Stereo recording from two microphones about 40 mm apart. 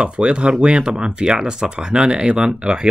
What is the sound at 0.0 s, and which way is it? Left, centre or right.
Speech, right.